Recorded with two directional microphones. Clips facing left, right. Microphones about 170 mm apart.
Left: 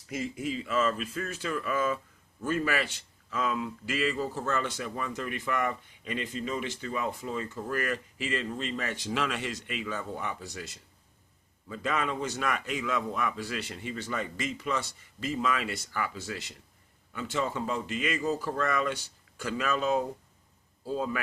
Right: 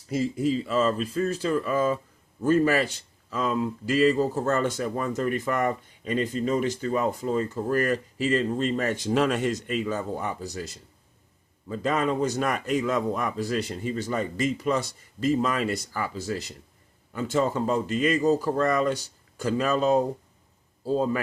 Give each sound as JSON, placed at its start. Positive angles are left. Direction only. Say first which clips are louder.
{"t": 0.1, "sound": "speech", "louder": "right 8 dB", "side_deg": -35}